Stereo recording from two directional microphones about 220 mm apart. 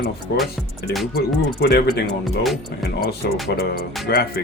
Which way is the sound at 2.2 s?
Centre (ahead or behind).